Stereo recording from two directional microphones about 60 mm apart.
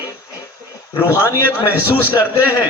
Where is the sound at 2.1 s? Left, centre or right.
Left.